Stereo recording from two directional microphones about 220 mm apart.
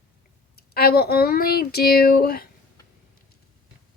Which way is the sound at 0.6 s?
45° left (ahead or behind).